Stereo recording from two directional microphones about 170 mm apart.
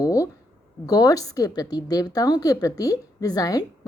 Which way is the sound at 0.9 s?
20° left (ahead or behind).